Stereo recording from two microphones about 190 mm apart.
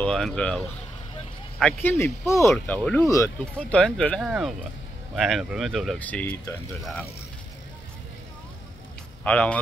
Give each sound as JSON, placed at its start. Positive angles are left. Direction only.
{"t": 0.0, "sound": "speech", "side_deg": 5}
{"t": 9.2, "sound": "speech", "side_deg": 5}